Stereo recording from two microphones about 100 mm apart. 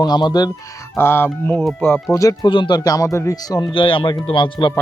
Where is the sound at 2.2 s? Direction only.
50° left (ahead or behind).